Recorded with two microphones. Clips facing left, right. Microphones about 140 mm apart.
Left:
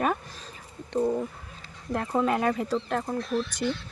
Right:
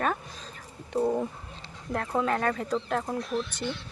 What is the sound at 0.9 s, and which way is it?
Speech, 15° right (ahead or behind).